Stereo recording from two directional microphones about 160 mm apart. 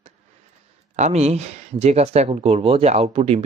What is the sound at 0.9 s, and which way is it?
Speech, 45° right (ahead or behind).